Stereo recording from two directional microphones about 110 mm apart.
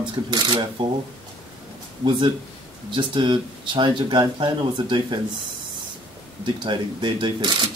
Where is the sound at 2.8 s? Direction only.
50° right (ahead or behind).